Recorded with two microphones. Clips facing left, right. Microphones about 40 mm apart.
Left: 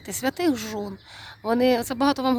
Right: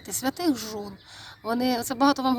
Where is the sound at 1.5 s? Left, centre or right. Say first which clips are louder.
Left 5 dB; left.